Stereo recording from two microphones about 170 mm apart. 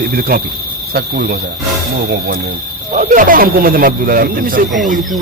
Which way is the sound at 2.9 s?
55° right (ahead or behind).